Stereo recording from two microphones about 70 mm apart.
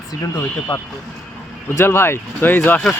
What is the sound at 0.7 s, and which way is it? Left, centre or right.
Speech, left.